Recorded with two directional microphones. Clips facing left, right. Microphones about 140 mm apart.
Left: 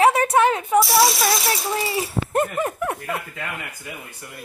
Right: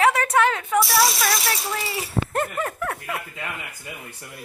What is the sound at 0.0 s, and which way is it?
Speech, 25° left (ahead or behind).